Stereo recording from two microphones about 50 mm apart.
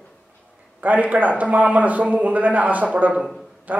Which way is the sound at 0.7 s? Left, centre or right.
Right.